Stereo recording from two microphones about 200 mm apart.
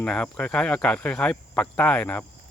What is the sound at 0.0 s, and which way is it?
Speech, 5° left (ahead or behind).